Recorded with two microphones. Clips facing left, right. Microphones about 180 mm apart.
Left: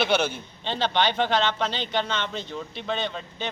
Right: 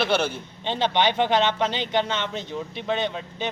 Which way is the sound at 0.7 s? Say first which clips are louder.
Right 2 dB; 15° right (ahead or behind).